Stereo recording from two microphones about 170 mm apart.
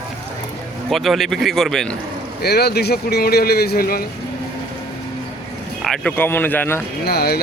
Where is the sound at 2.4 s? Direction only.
70° left (ahead or behind).